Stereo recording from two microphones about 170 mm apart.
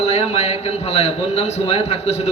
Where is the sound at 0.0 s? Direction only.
40° left (ahead or behind).